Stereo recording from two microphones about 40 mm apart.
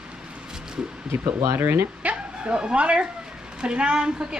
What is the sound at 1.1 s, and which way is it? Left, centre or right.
Speech, right.